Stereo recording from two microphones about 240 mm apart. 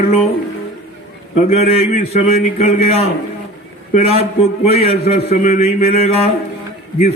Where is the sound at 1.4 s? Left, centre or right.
Left.